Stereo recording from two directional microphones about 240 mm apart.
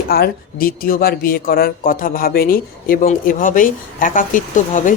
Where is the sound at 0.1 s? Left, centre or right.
Left.